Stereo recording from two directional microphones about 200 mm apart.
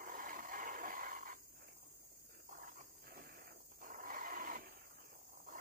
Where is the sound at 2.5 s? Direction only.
45° right (ahead or behind).